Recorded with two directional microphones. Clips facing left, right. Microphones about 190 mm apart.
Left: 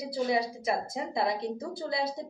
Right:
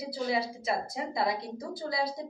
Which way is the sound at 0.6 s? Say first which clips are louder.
Left 1 dB; 25° left (ahead or behind).